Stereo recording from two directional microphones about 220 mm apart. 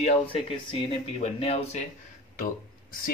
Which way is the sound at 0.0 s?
25° left (ahead or behind).